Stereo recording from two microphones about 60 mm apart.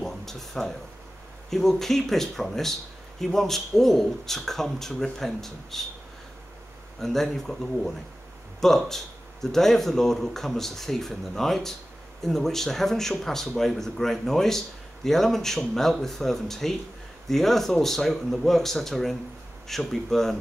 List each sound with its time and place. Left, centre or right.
0.0 s a sound: centre
1.5 s speech: centre
7.0 s speech: centre